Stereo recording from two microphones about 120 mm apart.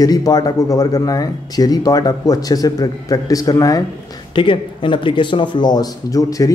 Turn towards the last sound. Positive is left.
turn(degrees=30)  # may be behind; listen again after turning